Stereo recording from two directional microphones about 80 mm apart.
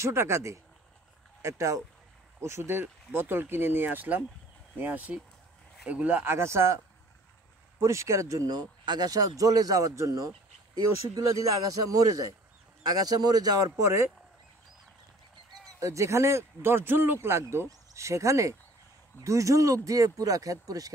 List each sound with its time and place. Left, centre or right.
0.0 s speech: right
6.2 s speech: right
7.8 s speech: right
15.8 s speech: right